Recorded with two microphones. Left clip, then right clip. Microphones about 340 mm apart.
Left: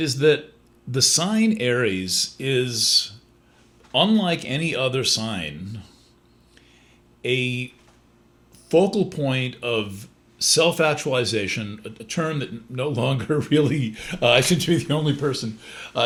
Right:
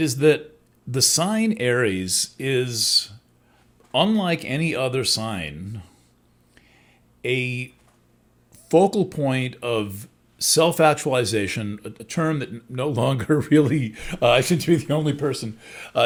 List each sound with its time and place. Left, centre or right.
0.0 s speech: right
7.2 s speech: right